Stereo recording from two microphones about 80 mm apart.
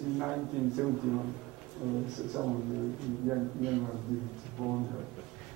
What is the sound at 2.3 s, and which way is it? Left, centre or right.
Speech, centre.